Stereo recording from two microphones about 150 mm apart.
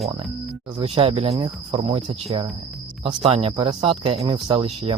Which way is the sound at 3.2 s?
40° right (ahead or behind).